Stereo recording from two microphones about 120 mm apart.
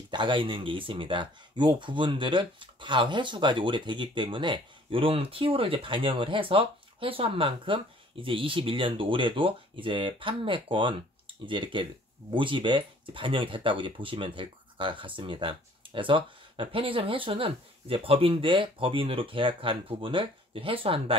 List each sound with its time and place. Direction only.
0.1 s speech: 45° right (ahead or behind)